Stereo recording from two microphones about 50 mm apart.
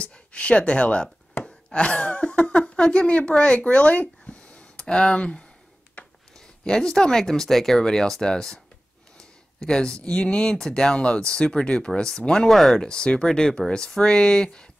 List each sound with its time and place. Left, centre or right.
0.0 s speech: left
9.2 s a sound: centre
10.0 s speech: centre
12.8 s speech: centre